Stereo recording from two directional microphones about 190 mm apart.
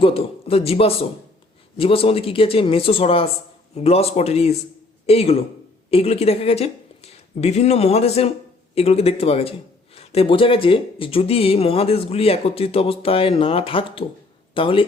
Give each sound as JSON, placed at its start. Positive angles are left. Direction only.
{"t": 0.0, "sound": "a man's voice", "side_deg": 30}